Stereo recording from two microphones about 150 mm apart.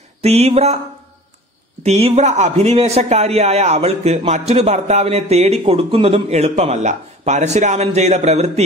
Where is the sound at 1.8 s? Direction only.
45° right (ahead or behind).